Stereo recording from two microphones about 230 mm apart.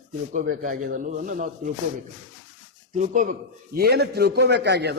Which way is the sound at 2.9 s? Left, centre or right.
Right.